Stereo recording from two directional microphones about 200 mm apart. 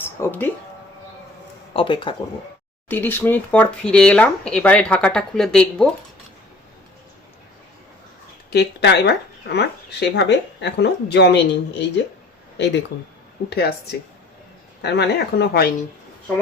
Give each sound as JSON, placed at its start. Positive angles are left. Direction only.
{"t": 0.0, "sound": "speech", "side_deg": 10}
{"t": 1.7, "sound": "speech", "side_deg": 25}
{"t": 2.9, "sound": "speech", "side_deg": 10}
{"t": 8.4, "sound": "speech", "side_deg": 55}
{"t": 14.8, "sound": "speech", "side_deg": 55}